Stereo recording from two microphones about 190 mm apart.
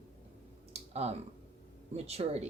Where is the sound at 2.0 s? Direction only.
35° right (ahead or behind).